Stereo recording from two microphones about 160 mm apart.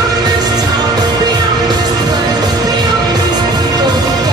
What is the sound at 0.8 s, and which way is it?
Music, 25° right (ahead or behind).